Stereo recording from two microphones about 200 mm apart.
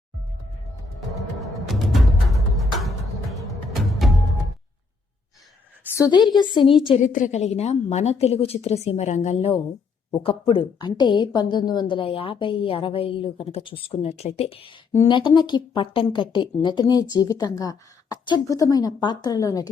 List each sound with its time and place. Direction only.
1.4 s music: centre (ahead or behind)
6.1 s a woman's voice: 20° left (ahead or behind)
7.0 s a woman's voice: 40° left (ahead or behind); by 19.7 s 15° left (ahead or behind)